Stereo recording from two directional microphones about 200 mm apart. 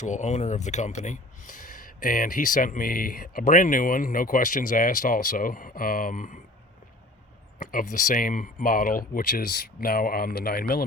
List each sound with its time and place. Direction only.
0.0 s speech: 35° left (ahead or behind)
7.7 s speech: 45° left (ahead or behind)